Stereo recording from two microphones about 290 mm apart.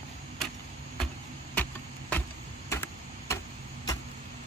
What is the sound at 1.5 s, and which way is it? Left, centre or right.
Vehicle, centre.